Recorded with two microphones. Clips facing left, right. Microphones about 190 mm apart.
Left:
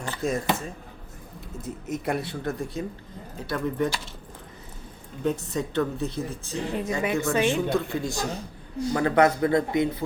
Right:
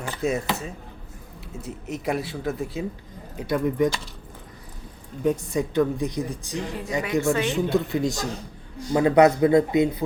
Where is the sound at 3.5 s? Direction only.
15° right (ahead or behind).